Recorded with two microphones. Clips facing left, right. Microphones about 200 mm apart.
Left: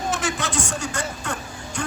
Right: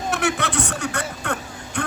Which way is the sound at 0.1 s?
60° right (ahead or behind).